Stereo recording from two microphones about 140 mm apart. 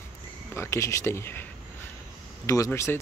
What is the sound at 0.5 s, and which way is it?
Speech, 20° left (ahead or behind).